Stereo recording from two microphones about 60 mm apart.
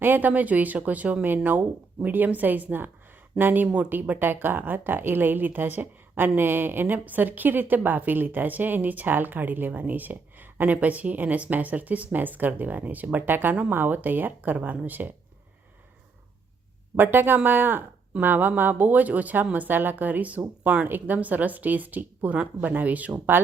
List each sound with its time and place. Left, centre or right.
0.0 s a woman's voice: right
17.0 s a woman's voice: right